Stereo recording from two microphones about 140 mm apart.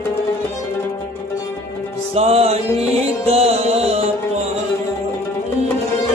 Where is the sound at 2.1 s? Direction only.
45° right (ahead or behind).